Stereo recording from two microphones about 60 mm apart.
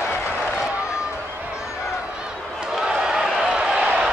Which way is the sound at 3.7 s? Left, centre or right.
Right.